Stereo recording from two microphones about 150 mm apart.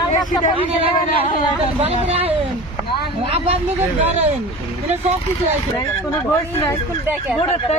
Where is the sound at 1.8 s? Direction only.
40° right (ahead or behind).